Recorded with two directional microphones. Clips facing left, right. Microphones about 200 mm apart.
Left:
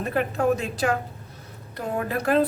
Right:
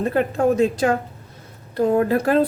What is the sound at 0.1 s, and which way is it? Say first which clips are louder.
Speech: right 2 dB; 35° right (ahead or behind).